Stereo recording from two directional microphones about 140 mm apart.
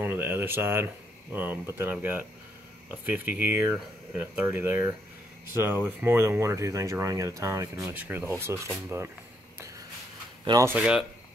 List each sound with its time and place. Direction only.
0.0 s a sound: 15° right (ahead or behind)
1.3 s speech: 15° right (ahead or behind)
10.4 s speech: 30° right (ahead or behind)
10.8 s speech: 5° right (ahead or behind)